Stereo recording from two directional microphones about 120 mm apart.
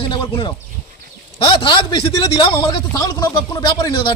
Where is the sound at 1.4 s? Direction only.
45° left (ahead or behind).